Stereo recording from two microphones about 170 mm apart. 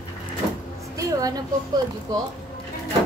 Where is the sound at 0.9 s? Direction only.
20° right (ahead or behind).